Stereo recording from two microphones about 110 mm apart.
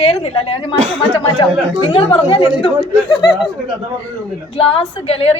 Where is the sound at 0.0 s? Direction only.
65° left (ahead or behind).